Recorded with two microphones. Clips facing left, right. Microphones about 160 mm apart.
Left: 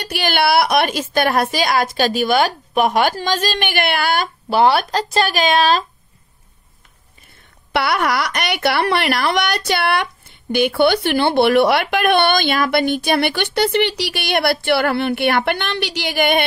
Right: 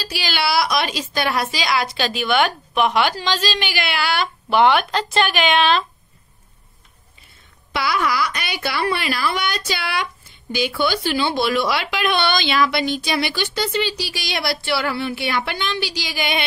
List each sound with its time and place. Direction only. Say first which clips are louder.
0.0 s a woman's voice: left 6 dB; 55° left (ahead or behind); by 5.9 s 40° left (ahead or behind)
7.7 s speech: left 3 dB; 65° left (ahead or behind)